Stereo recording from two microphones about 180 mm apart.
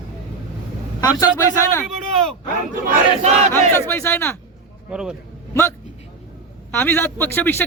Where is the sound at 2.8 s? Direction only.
45° right (ahead or behind).